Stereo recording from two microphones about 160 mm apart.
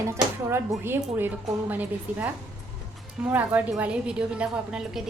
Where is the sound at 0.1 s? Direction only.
15° right (ahead or behind).